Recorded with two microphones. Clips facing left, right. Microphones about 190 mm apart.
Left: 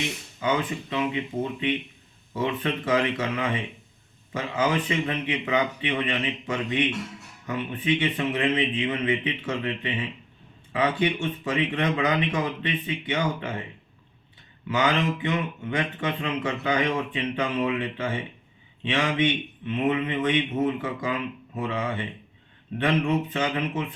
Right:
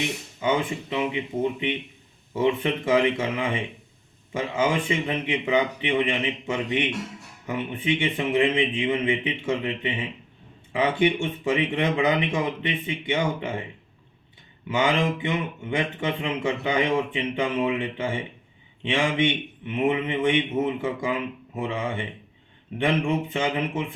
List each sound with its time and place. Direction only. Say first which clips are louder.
0.3 s a man's voice: right 1 dB; 25° right (ahead or behind)
7.4 s a man's voice: even; 25° right (ahead or behind)
14.7 s a man's voice: right 1 dB; 25° right (ahead or behind)